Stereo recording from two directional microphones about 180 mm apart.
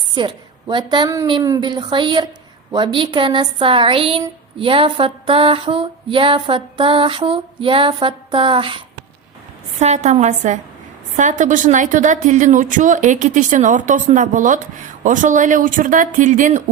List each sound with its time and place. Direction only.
0.1 s a woman's voice: 25° right (ahead or behind)
1.3 s a sound: 20° right (ahead or behind)
9.7 s a woman's voice: 40° right (ahead or behind)